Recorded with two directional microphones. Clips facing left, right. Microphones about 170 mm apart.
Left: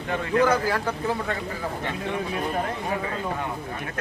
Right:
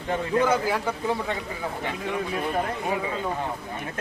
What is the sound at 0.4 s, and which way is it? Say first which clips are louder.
Speech: left 1 dB; 10° right (ahead or behind).